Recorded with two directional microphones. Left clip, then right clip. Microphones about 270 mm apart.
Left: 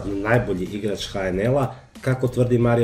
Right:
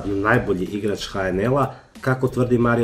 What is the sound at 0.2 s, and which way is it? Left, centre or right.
Speech, centre.